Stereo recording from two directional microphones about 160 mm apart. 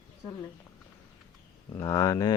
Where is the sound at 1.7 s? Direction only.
20° left (ahead or behind).